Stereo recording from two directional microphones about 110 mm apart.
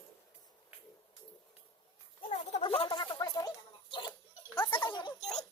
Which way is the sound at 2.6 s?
60° left (ahead or behind).